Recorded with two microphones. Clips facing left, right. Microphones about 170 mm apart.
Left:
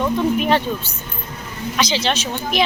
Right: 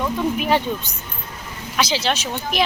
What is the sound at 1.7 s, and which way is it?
Speech, 5° right (ahead or behind).